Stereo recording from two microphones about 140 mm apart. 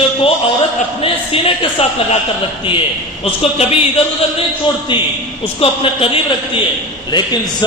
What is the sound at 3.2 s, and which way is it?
Speech, 45° left (ahead or behind).